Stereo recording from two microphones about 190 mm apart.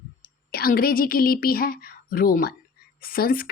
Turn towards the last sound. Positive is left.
turn(degrees=50)  # may be behind; listen again after turning